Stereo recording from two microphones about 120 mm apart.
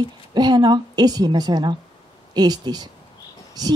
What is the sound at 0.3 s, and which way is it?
A woman's voice, 35° right (ahead or behind).